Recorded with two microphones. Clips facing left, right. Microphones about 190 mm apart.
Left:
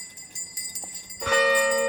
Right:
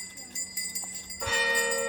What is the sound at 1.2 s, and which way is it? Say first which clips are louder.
Bell: left 9 dB; 65° left (ahead or behind).